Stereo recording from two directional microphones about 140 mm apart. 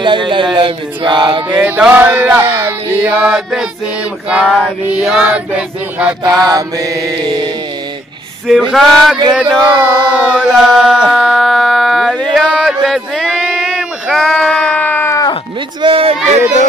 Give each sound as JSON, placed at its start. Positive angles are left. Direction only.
{"t": 0.0, "sound": "mantra", "side_deg": -35}
{"t": 1.5, "sound": "music", "side_deg": -10}
{"t": 6.2, "sound": "mantra", "side_deg": -25}
{"t": 8.5, "sound": "male singing", "side_deg": 0}
{"t": 9.3, "sound": "a sound", "side_deg": -10}
{"t": 15.8, "sound": "a sound", "side_deg": -45}